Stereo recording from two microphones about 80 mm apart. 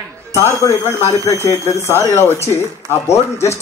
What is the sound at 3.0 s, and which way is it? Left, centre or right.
Speech, left.